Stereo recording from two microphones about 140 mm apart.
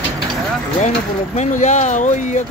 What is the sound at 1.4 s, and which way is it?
Speech, 60° left (ahead or behind).